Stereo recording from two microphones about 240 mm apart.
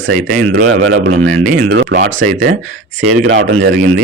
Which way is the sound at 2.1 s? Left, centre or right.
Right.